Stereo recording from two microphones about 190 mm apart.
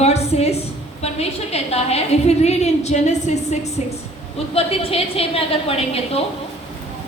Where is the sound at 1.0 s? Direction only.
35° left (ahead or behind).